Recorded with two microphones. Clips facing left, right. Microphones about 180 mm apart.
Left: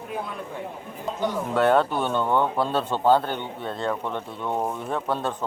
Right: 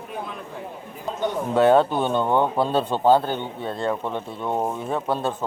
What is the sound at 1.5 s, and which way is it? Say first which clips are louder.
Speech: right 4 dB; 15° right (ahead or behind).